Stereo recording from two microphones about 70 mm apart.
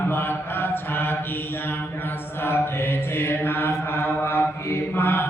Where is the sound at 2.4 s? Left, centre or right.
Left.